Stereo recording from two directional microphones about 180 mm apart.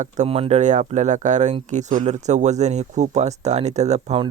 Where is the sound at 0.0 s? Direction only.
35° right (ahead or behind).